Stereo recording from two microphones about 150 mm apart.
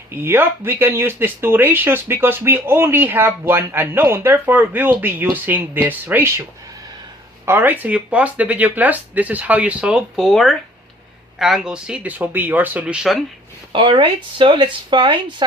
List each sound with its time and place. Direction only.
0.1 s speech: 15° right (ahead or behind)
7.4 s speech: 15° right (ahead or behind)
13.7 s speech: 35° right (ahead or behind)